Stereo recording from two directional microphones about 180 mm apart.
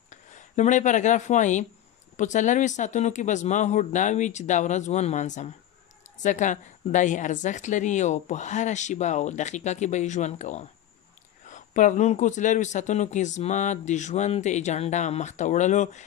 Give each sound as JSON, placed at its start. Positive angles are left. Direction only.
{"t": 0.1, "sound": "speech", "side_deg": 40}